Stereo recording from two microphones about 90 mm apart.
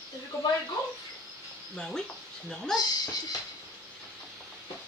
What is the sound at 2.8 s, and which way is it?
Speech, 45° left (ahead or behind).